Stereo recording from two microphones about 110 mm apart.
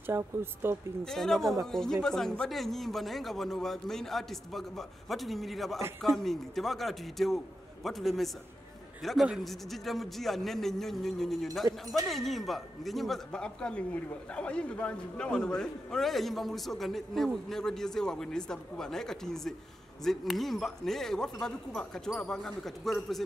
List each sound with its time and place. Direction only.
0.4 s speech: 20° right (ahead or behind)
1.0 s speech: 5° left (ahead or behind)